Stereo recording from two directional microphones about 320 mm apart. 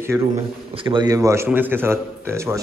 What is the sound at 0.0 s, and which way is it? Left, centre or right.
A man's voice, centre.